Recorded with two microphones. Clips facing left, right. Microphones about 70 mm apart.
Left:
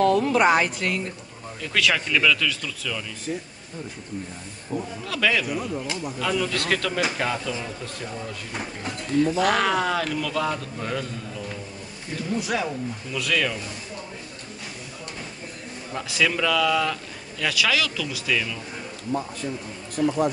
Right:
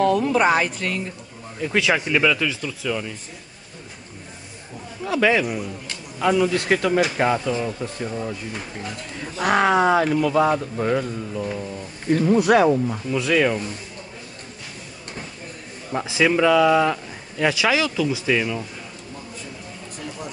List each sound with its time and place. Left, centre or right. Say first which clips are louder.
0.0 s speech: right 1 dB; centre
1.6 s speech: right 3 dB; right
5.0 s speech: right 6 dB; right
9.4 s speech: right 4 dB; right
12.1 s speech: right 11 dB; right
13.1 s speech: right 6 dB; right
15.9 s speech: right 5 dB; right